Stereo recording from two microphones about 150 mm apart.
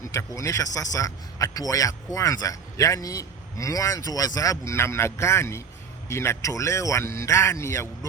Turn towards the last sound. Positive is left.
turn(degrees=20)  # may be behind; listen again after turning